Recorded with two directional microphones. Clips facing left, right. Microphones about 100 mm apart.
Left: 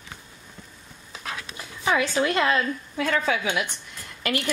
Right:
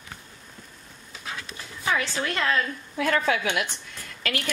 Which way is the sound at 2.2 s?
20° left (ahead or behind).